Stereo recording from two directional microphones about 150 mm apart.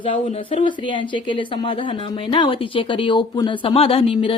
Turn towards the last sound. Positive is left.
turn(degrees=40)  # may be behind; listen again after turning